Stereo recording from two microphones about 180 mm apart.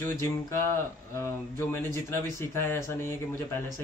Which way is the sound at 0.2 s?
15° left (ahead or behind).